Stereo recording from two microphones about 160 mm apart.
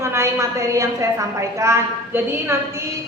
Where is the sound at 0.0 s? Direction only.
15° right (ahead or behind).